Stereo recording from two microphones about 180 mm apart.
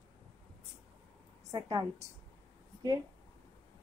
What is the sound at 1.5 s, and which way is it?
Speech, 20° right (ahead or behind).